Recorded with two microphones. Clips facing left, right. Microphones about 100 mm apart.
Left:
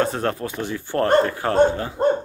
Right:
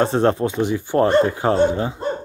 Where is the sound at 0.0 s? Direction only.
25° right (ahead or behind).